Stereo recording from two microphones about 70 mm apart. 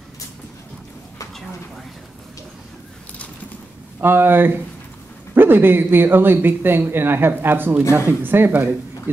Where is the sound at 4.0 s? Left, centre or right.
Right.